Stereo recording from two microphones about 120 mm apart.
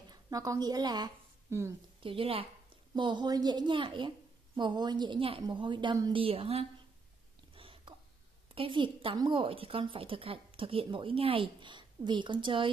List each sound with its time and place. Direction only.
0.1 s a woman's voice: 30° right (ahead or behind)
1.5 s a woman's voice: 25° right (ahead or behind)
2.0 s a woman's voice: 45° right (ahead or behind)
2.9 s a woman's voice: 40° right (ahead or behind)
6.1 s a woman's voice: 50° right (ahead or behind)
7.5 s a sound: 50° right (ahead or behind)
8.5 s a woman's voice: 45° right (ahead or behind)